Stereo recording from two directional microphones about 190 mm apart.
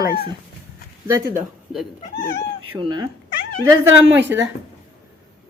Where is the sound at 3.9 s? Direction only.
80° right.